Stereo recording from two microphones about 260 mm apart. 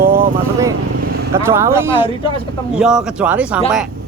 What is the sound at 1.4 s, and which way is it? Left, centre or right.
Speech, centre.